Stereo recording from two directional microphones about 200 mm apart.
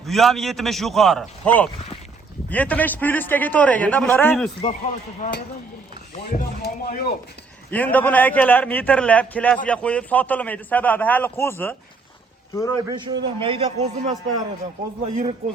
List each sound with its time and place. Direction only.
0.0 s a man's voice: centre (ahead or behind)
5.2 s speech: 35° left (ahead or behind)
6.6 s speech: 50° left (ahead or behind)
7.7 s a man's voice: 10° left (ahead or behind)
12.9 s a man's voice: 20° right (ahead or behind)